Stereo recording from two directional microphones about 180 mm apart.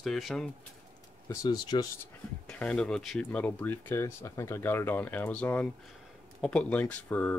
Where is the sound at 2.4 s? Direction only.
5° left (ahead or behind).